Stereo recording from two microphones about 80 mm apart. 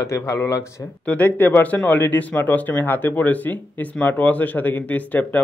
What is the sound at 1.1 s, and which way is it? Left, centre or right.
Speech, left.